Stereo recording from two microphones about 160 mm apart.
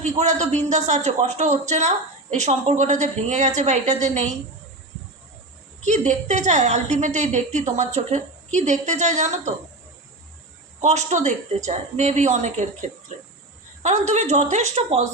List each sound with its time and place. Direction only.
0.0 s a woman's voice: 45° right (ahead or behind)
5.8 s a woman's voice: 50° right (ahead or behind)
10.8 s a woman's voice: 45° right (ahead or behind)
13.8 s a woman's voice: 45° right (ahead or behind)